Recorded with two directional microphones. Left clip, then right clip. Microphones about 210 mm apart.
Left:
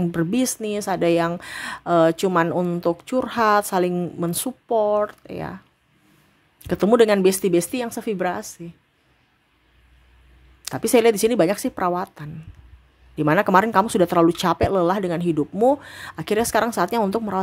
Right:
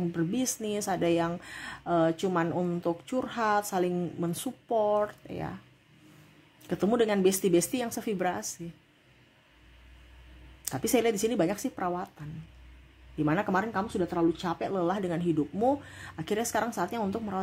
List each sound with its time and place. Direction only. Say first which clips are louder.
0.1 s a woman's voice: left 8 dB; 30° left (ahead or behind)
6.7 s a woman's voice: left 11 dB; 30° left (ahead or behind)
10.6 s a woman's voice: left 10 dB; 20° left (ahead or behind)